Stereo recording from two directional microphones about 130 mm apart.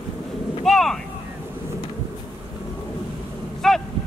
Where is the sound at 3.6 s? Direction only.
5° left (ahead or behind).